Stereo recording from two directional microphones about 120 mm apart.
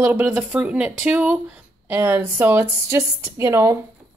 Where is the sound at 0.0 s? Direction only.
15° right (ahead or behind).